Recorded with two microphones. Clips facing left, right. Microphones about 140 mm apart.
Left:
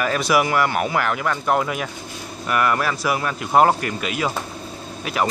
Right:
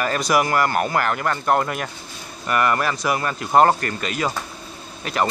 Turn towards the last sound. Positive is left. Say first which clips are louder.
# left 1 dB
turn(degrees=5)  # may be behind; listen again after turning